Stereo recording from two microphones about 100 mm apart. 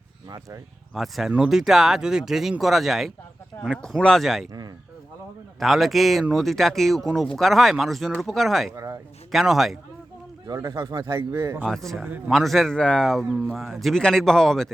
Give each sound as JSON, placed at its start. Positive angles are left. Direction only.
{"t": 0.3, "sound": "speech", "side_deg": -30}
{"t": 0.9, "sound": "speech", "side_deg": 0}
{"t": 5.5, "sound": "speech", "side_deg": 0}
{"t": 8.7, "sound": "a sound", "side_deg": -35}
{"t": 9.3, "sound": "speech", "side_deg": 0}
{"t": 10.4, "sound": "speech", "side_deg": -40}
{"t": 11.6, "sound": "speech", "side_deg": 5}